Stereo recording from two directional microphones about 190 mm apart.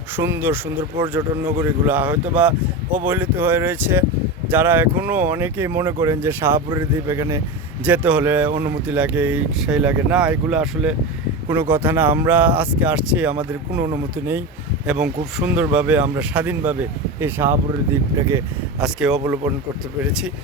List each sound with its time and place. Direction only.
0.2 s speech: 10° right (ahead or behind)
14.8 s speech: 5° right (ahead or behind)
18.8 s speech: 5° right (ahead or behind)